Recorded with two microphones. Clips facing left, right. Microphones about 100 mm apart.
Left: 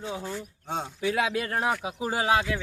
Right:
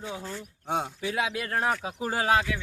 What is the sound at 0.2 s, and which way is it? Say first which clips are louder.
Speech: left 3 dB; 10° left (ahead or behind).